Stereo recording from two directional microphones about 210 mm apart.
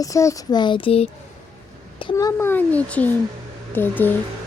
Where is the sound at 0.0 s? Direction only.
15° left (ahead or behind).